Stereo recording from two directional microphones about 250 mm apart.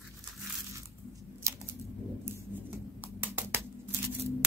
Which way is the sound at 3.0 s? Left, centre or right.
Centre.